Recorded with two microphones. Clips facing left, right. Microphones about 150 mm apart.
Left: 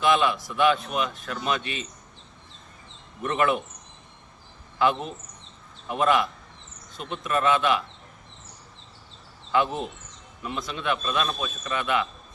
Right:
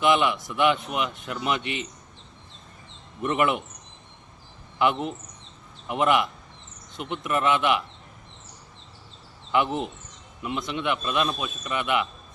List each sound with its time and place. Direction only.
0.0 s a man's voice: 20° right (ahead or behind)
3.2 s a man's voice: 20° right (ahead or behind)
4.8 s a man's voice: 20° right (ahead or behind)
9.5 s a man's voice: 20° right (ahead or behind)